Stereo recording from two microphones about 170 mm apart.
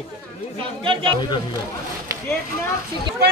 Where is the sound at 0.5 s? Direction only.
30° right (ahead or behind).